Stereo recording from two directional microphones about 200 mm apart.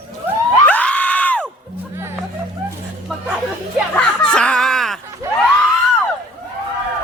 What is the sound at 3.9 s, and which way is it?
Chicken, 5° left (ahead or behind).